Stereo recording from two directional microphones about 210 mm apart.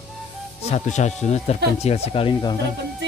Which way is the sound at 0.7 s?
35° left (ahead or behind).